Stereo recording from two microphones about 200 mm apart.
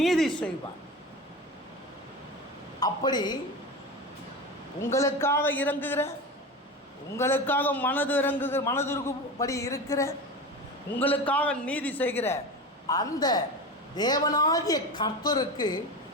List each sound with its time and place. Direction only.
0.0 s a sound: centre (ahead or behind)
2.8 s a woman's voice: 20° left (ahead or behind)
4.8 s a man's voice: 15° left (ahead or behind)
7.2 s a man's voice: 10° left (ahead or behind)